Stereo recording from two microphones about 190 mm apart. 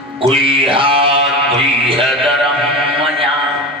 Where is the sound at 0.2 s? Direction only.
30° right (ahead or behind).